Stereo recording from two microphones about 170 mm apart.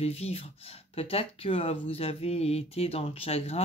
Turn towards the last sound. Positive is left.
turn(degrees=35)  # may be behind; listen again after turning